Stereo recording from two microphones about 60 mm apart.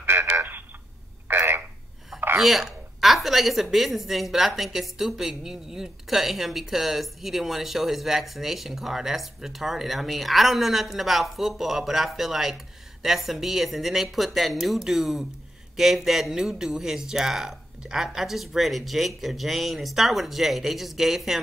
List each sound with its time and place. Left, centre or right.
0.0 s telephone: right
1.3 s frog: right
2.3 s speech: centre